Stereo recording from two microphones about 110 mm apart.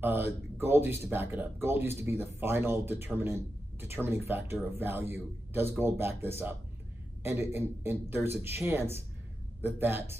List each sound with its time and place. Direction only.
0.0 s speech: 20° right (ahead or behind)